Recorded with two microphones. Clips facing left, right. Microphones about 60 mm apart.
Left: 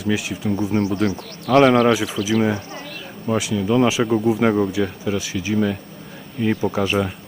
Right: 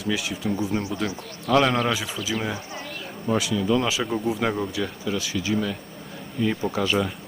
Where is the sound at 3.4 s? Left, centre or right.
Left.